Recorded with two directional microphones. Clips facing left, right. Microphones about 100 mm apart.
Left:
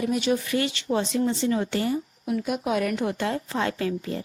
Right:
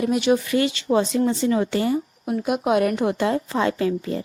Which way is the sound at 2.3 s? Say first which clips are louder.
Right 5 dB; 55° right (ahead or behind).